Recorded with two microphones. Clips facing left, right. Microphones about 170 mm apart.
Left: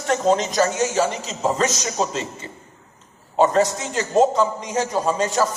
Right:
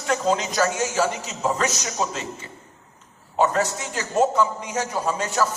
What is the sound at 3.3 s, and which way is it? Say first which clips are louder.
A man's voice: left 4 dB; 30° left (ahead or behind).